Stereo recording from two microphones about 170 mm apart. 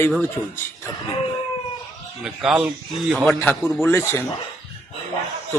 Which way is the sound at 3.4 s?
15° left (ahead or behind).